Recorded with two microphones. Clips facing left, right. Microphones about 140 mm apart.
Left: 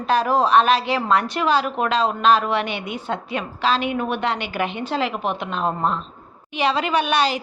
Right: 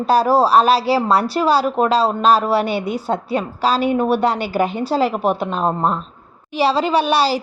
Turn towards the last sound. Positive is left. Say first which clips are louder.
# right 4 dB
turn(degrees=-35)  # may be behind; listen again after turning